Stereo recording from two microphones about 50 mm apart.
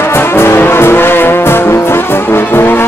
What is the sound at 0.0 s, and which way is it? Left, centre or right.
Music, left.